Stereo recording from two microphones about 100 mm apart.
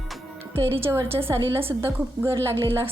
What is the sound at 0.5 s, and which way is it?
A woman's voice, 25° right (ahead or behind).